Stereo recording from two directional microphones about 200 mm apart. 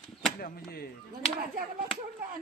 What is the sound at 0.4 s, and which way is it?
Speech, 50° left (ahead or behind).